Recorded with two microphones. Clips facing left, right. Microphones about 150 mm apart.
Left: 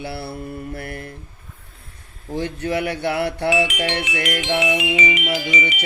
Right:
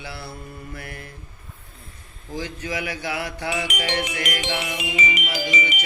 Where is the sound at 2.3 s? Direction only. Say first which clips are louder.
Left 6 dB; 65° left (ahead or behind).